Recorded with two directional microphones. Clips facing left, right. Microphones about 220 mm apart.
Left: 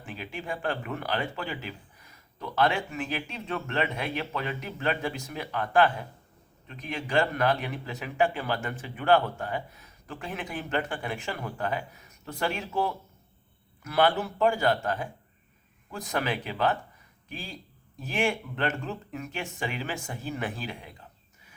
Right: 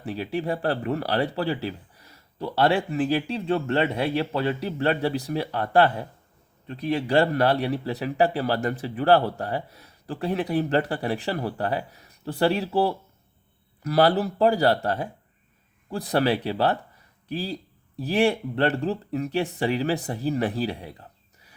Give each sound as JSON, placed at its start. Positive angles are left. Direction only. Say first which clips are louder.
{"t": 0.0, "sound": "speech", "louder": "right 10 dB", "side_deg": -35}